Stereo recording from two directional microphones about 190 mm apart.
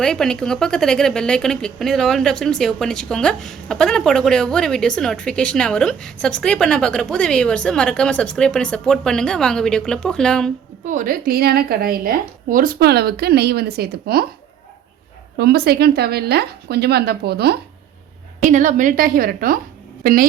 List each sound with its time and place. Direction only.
0.0 s speech: 5° left (ahead or behind)
10.8 s a woman's voice: 45° right (ahead or behind)
15.4 s a woman's voice: 55° right (ahead or behind)
18.4 s a woman's voice: 40° right (ahead or behind)